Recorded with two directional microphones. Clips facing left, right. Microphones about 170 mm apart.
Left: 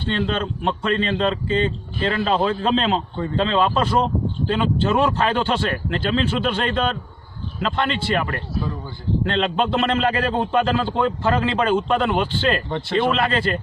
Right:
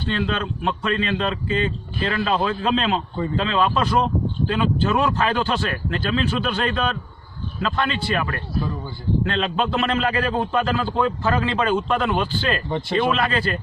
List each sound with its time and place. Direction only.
0.0 s speech: 25° left (ahead or behind)
12.6 s speech: 10° right (ahead or behind)
13.1 s speech: 30° left (ahead or behind)